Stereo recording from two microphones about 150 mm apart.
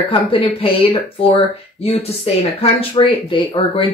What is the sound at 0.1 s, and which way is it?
Speech, 35° left (ahead or behind).